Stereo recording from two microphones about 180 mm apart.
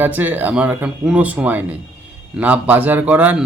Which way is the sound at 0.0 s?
10° right (ahead or behind).